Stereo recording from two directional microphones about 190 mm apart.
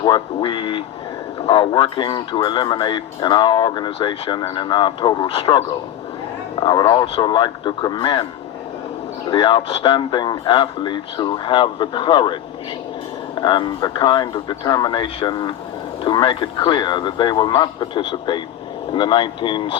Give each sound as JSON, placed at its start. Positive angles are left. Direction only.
{"t": 0.0, "sound": "speech", "side_deg": 25}
{"t": 6.6, "sound": "speech", "side_deg": 20}
{"t": 9.3, "sound": "speech", "side_deg": 25}